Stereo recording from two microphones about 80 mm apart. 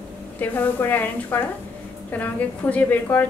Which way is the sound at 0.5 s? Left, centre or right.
Left.